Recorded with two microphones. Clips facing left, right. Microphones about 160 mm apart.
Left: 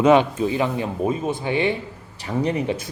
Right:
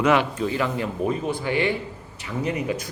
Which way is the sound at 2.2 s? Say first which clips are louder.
Left 4 dB; 35° left (ahead or behind).